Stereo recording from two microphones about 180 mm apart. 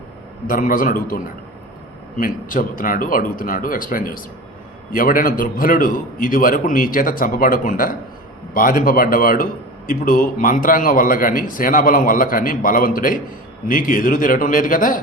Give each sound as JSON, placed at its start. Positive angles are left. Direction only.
{"t": 0.4, "sound": "a man's voice", "side_deg": 50}